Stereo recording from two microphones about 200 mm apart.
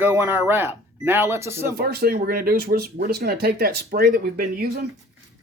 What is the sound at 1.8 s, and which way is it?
Speech, 50° right (ahead or behind).